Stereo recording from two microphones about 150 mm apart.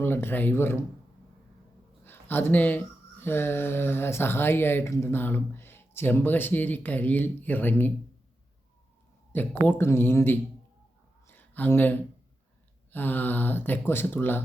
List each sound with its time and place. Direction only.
0.0 s speech: 15° left (ahead or behind)
2.0 s speech: 15° left (ahead or behind)
9.3 s speech: 10° left (ahead or behind)
11.3 s a sound: 10° left (ahead or behind)
12.9 s speech: 15° left (ahead or behind)